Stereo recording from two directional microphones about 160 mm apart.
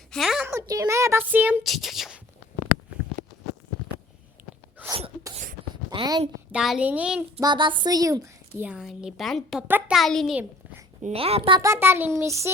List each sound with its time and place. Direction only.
0.1 s a sound: centre (ahead or behind)
0.4 s a child's voice: 20° right (ahead or behind)
1.6 s a sound: centre (ahead or behind)
4.8 s sneeze: 10° right (ahead or behind)
5.7 s a sound: 30° right (ahead or behind)
6.5 s a child's voice: 5° right (ahead or behind)
7.4 s a woman's voice: 30° right (ahead or behind)
8.6 s a woman's voice: 5° right (ahead or behind)
9.6 s a child's voice: 10° right (ahead or behind)
9.9 s a woman's voice: centre (ahead or behind)
11.0 s a woman's voice: 40° right (ahead or behind)
11.6 s a child's voice: 15° right (ahead or behind)